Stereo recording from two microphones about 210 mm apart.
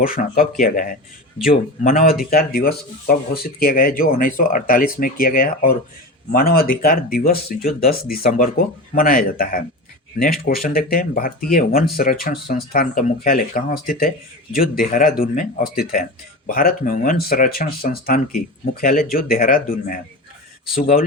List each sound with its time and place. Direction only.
0.0 s speech: 45° left (ahead or behind)